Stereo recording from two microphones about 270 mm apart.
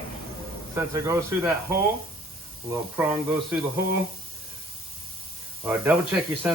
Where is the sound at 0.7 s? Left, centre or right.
Centre.